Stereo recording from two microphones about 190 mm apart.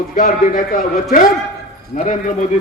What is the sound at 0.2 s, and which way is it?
Speech, 45° left (ahead or behind).